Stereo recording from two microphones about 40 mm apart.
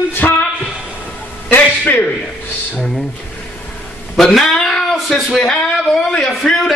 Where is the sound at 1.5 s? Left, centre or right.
Left.